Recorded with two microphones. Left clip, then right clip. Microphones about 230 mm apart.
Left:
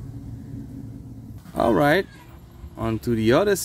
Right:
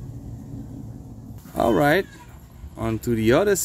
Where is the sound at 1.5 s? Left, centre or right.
Centre.